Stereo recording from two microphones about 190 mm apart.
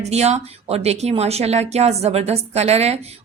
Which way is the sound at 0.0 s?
35° right (ahead or behind).